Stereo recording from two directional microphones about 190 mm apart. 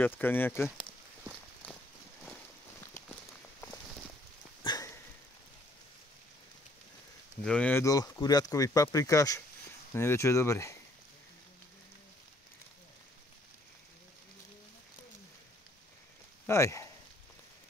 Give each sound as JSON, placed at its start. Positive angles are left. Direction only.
{"t": 0.0, "sound": "speech", "side_deg": 10}
{"t": 1.6, "sound": "walk", "side_deg": 10}
{"t": 4.6, "sound": "sniff", "side_deg": 15}
{"t": 7.4, "sound": "speech", "side_deg": 5}
{"t": 16.4, "sound": "speech", "side_deg": 15}